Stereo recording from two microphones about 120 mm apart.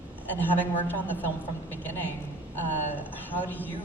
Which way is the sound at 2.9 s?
15° left (ahead or behind).